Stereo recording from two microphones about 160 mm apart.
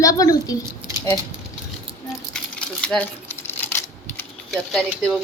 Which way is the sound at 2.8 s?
5° left (ahead or behind).